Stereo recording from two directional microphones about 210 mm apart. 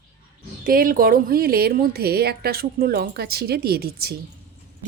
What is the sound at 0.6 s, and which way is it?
A woman's voice, 40° right (ahead or behind).